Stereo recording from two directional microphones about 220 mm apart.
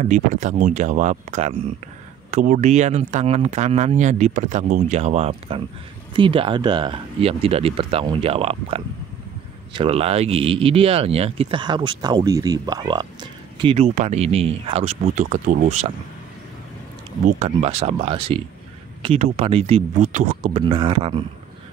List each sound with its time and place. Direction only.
0.0 s speech: 35° right (ahead or behind)
17.4 s speech: 30° right (ahead or behind)